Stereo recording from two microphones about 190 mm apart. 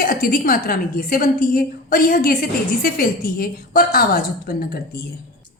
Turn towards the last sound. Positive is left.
turn(degrees=55)  # may be behind; listen again after turning